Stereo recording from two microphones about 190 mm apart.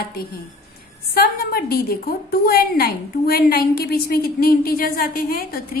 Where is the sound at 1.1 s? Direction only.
55° left (ahead or behind).